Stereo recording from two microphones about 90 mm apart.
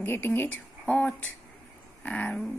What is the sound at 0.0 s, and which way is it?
Speech, 20° left (ahead or behind).